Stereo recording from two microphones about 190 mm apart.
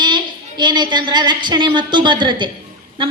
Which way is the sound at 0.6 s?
25° right (ahead or behind).